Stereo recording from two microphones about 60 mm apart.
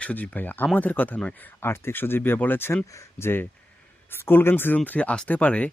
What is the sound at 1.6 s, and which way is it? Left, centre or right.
Speech, left.